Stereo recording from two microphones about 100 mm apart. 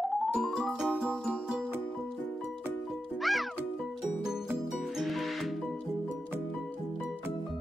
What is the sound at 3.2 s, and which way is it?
Music, centre (ahead or behind).